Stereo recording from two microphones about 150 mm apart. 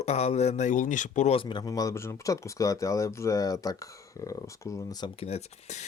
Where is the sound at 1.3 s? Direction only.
35° left (ahead or behind).